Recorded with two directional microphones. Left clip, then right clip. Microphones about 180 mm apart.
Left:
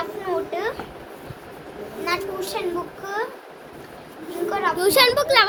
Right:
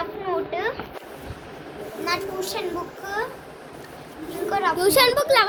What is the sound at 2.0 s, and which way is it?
Speech, 20° left (ahead or behind).